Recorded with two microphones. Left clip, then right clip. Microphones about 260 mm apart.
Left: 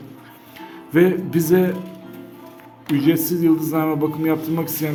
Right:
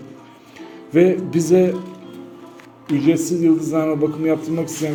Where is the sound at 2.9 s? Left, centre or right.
Centre.